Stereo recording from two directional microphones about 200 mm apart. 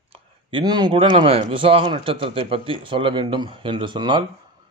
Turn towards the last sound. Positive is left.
turn(degrees=-25)  # may be behind; listen again after turning